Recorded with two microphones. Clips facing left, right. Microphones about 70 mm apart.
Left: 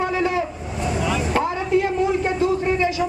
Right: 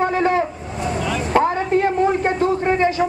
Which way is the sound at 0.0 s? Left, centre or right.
Right.